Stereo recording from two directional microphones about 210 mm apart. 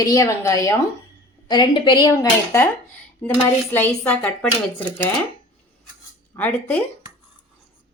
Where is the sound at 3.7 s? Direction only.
10° left (ahead or behind).